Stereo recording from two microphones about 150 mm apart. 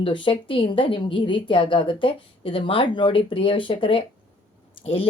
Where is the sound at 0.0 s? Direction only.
35° left (ahead or behind).